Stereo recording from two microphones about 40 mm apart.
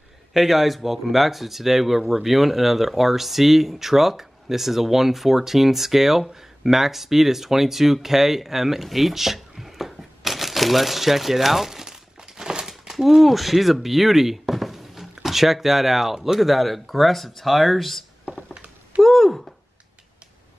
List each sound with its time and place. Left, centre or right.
0.3 s speech: centre
18.2 s a sound: right
19.0 s speech: centre